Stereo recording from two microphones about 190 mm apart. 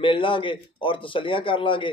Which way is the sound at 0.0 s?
25° left (ahead or behind).